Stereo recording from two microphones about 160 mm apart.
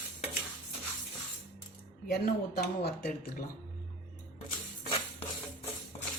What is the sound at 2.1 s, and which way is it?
Speech, 80° left.